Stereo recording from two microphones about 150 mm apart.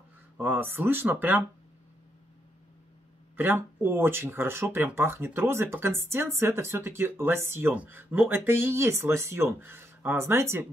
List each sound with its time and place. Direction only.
0.4 s speech: 15° right (ahead or behind)
3.3 s speech: 15° right (ahead or behind)